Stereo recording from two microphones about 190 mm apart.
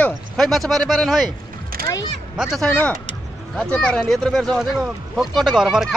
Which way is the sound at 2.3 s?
Centre (ahead or behind).